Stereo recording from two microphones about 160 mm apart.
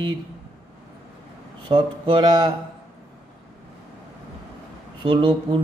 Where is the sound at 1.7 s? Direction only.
30° right (ahead or behind).